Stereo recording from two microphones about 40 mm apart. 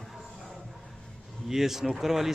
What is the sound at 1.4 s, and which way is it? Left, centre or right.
Speech, centre.